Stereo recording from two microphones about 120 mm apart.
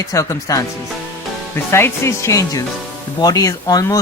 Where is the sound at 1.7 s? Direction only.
20° left (ahead or behind).